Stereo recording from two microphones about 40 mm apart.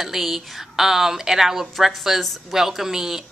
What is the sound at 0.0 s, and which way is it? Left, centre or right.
A woman's voice, centre.